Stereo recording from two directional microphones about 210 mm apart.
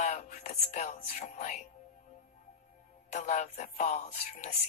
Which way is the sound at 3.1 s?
35° left (ahead or behind).